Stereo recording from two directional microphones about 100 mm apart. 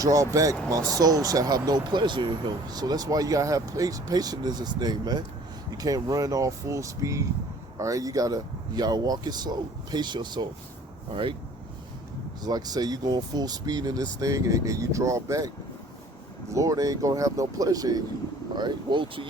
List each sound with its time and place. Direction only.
0.0 s speech: 35° right (ahead or behind)
11.1 s speech: 55° right (ahead or behind)
12.4 s speech: 40° right (ahead or behind)
16.5 s speech: 35° right (ahead or behind)
18.5 s speech: 50° right (ahead or behind)